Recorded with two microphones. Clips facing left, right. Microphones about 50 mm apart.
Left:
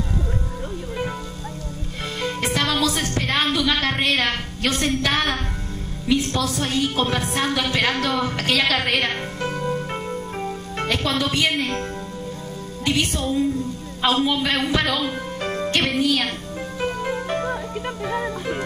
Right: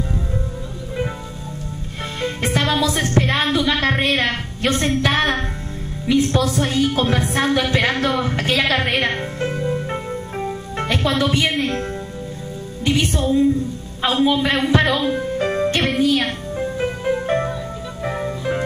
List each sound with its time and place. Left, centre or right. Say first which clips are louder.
2.2 s music: right 3 dB; right
6.1 s a woman's voice: right 5 dB; right
9.7 s music: right 2 dB; centre
10.8 s a woman's voice: right 3 dB; right
16.5 s music: right 4 dB; centre